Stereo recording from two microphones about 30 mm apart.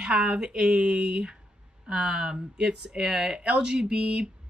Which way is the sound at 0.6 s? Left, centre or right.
Right.